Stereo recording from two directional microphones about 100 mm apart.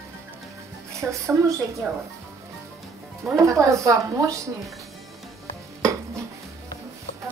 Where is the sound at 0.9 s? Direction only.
30° right (ahead or behind).